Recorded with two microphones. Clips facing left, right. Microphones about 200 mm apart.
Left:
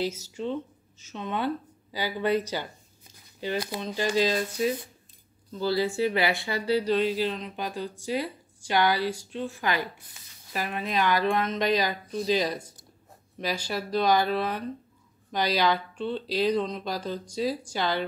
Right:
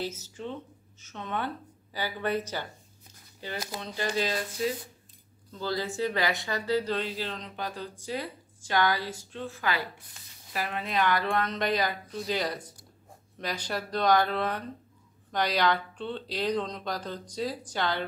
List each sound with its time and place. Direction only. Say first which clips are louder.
0.0 s speech: left 5 dB; 10° left (ahead or behind)